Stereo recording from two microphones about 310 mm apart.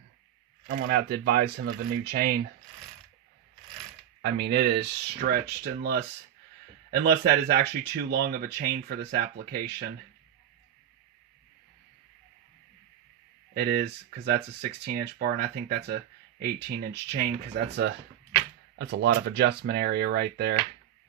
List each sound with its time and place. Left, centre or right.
0.7 s speech: right
4.2 s speech: right
13.6 s speech: right